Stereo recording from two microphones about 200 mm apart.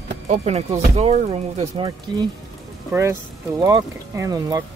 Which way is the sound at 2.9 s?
15° right (ahead or behind).